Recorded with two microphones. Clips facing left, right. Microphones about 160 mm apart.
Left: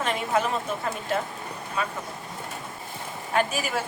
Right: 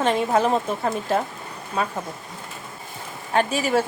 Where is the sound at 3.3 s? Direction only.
30° right (ahead or behind).